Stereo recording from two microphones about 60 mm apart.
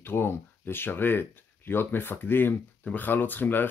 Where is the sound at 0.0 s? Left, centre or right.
Left.